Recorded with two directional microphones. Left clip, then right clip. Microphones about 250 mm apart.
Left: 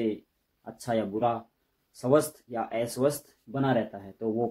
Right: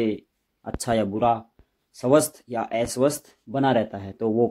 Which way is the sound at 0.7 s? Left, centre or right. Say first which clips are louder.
Right 5 dB; right.